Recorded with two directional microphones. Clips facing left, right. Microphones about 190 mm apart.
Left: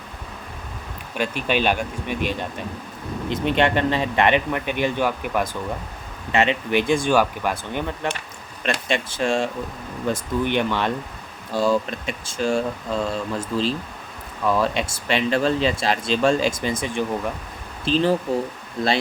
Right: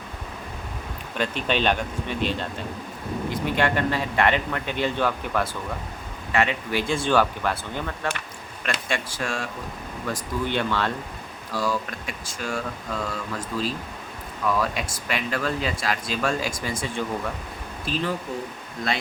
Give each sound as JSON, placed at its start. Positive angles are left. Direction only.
{"t": 1.1, "sound": "speech", "side_deg": 10}
{"t": 17.8, "sound": "speech", "side_deg": 30}